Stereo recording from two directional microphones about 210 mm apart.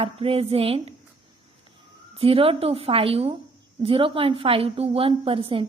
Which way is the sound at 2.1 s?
25° right (ahead or behind).